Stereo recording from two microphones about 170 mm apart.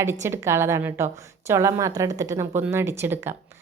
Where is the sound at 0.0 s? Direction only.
15° right (ahead or behind).